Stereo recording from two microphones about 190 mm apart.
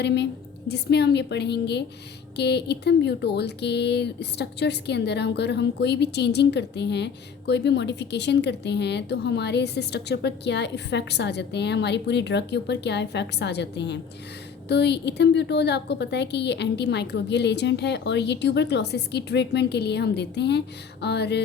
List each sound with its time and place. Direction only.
0.0 s speech: 65° left (ahead or behind)